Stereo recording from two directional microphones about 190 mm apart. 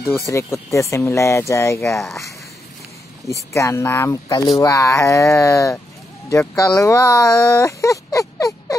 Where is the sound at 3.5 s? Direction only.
15° left (ahead or behind).